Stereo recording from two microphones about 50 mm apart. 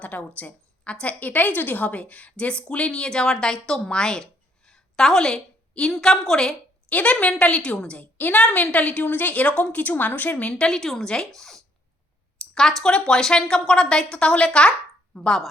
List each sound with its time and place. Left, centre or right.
0.0 s a woman's voice: left; by 6.6 s centre
6.9 s a woman's voice: left
8.0 s a woman's voice: left
8.4 s a woman's voice: left
10.7 s a woman's voice: centre
12.4 s a sound: centre
12.9 s a woman's voice: centre